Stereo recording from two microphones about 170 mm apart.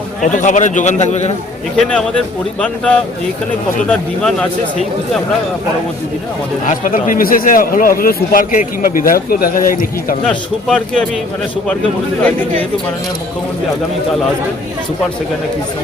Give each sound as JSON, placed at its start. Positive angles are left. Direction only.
{"t": 0.2, "sound": "a man's voice", "side_deg": 50}
{"t": 1.7, "sound": "speech", "side_deg": 5}
{"t": 6.7, "sound": "a man's voice", "side_deg": 50}
{"t": 10.2, "sound": "speech", "side_deg": 0}